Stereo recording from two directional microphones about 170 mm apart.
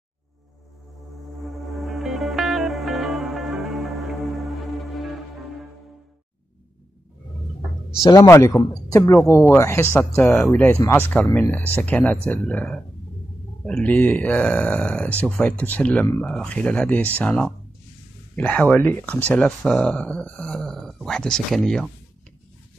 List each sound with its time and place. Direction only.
1.4 s music: centre (ahead or behind)
8.0 s speech: 20° left (ahead or behind); by 21.9 s 5° left (ahead or behind)